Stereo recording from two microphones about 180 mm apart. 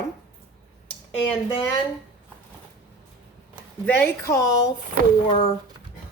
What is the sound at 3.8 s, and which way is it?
Speech, 15° left (ahead or behind).